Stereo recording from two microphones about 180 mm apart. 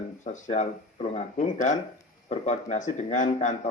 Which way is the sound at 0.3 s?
40° left (ahead or behind).